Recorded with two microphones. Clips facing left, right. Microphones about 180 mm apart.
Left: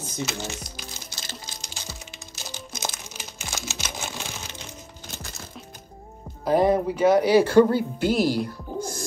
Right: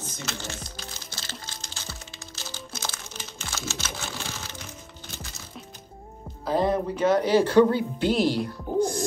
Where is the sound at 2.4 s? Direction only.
15° left (ahead or behind).